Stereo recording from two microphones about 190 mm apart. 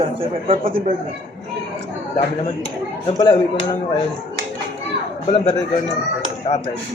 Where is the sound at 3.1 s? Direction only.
20° left (ahead or behind).